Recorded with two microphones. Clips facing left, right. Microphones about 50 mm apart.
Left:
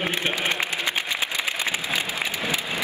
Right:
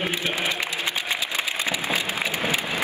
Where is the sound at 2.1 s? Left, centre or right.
Right.